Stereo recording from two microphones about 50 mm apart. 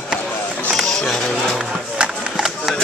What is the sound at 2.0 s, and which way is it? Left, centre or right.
Music, centre.